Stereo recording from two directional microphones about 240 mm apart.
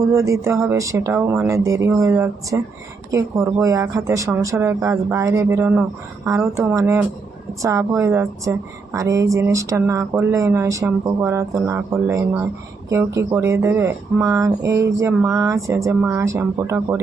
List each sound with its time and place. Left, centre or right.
0.1 s a woman's voice: centre